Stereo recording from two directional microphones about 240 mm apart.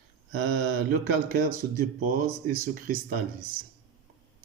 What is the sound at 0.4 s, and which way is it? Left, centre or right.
Speech, right.